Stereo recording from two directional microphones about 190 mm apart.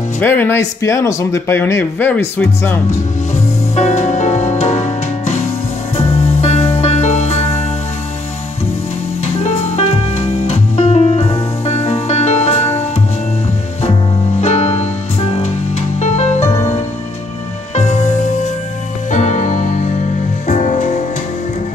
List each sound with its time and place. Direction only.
0.2 s speech: 10° left (ahead or behind)
3.7 s music: 35° left (ahead or behind)
9.2 s music: 35° left (ahead or behind)
14.4 s music: 35° left (ahead or behind)
16.3 s music: 15° left (ahead or behind)
17.7 s music: 35° left (ahead or behind)